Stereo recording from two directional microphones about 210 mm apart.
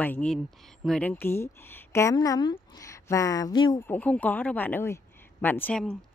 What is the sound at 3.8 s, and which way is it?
Speech, 10° left (ahead or behind).